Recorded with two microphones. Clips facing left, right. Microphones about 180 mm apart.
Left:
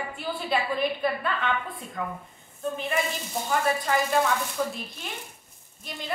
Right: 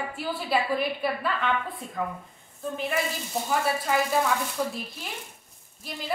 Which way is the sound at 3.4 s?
5° right (ahead or behind).